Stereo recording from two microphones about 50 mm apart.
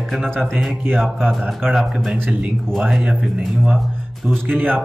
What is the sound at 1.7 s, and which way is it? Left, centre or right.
Speech, centre.